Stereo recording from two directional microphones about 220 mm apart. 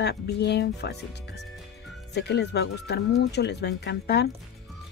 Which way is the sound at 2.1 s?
50° left (ahead or behind).